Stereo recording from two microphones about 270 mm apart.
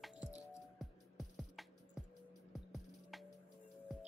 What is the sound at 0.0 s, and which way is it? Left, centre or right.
Music, centre.